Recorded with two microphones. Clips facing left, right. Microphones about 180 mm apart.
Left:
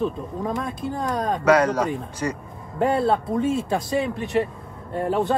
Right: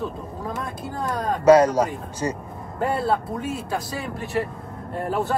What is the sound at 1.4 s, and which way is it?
Speech, 30° right (ahead or behind).